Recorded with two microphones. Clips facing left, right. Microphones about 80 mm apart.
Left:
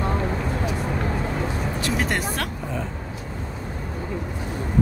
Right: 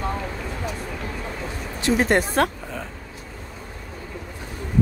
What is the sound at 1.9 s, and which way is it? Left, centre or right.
Speech, right.